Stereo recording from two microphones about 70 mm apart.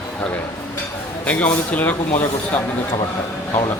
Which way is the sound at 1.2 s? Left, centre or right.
Left.